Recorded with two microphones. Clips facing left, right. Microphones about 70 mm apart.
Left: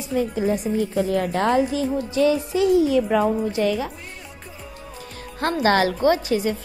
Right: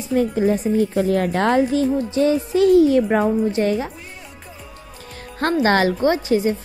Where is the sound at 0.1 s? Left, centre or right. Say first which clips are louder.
Right 4 dB; right.